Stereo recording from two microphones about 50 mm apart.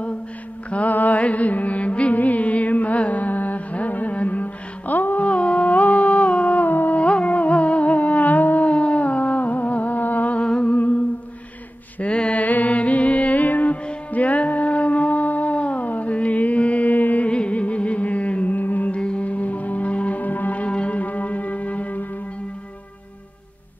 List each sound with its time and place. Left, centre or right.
0.7 s music: left
7.0 s music: left
12.0 s music: left
18.9 s music: left